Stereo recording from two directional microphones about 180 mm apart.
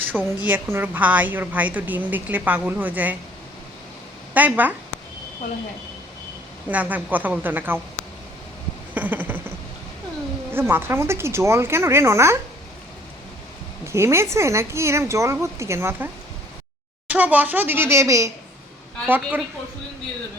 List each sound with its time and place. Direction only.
0.0 s a sound: 10° right (ahead or behind)
0.4 s a woman's voice: 10° right (ahead or behind)
4.4 s a woman's voice: 10° right (ahead or behind)
6.7 s a woman's voice: 10° right (ahead or behind)
9.0 s a sound: 10° right (ahead or behind)
10.5 s a woman's voice: 10° right (ahead or behind)
13.8 s a woman's voice: 15° right (ahead or behind)
17.1 s a woman's voice: 10° right (ahead or behind)